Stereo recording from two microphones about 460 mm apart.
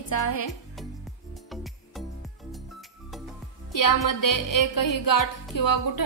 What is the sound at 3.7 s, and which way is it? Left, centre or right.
A woman's voice, left.